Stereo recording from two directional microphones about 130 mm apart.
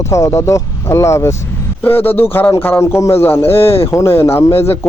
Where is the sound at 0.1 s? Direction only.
20° left (ahead or behind).